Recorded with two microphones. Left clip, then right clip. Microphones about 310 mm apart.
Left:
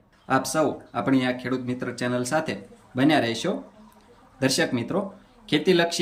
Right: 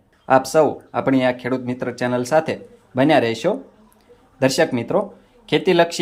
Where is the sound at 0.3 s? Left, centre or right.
Centre.